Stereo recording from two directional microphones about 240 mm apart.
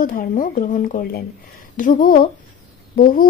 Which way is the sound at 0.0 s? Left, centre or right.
Left.